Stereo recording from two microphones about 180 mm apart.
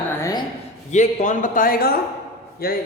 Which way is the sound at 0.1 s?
15° left (ahead or behind).